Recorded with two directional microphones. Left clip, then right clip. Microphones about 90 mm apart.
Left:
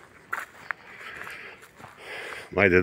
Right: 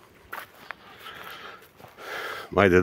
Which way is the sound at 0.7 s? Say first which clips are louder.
Left 7 dB; 10° right (ahead or behind).